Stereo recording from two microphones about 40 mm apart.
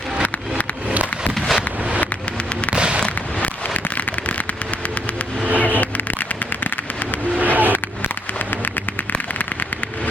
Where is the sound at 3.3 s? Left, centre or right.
Left.